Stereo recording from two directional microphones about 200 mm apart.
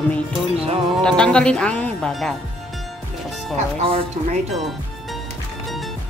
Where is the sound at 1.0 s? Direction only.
5° left (ahead or behind).